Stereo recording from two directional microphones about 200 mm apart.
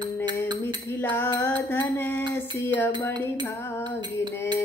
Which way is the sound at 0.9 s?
10° left (ahead or behind).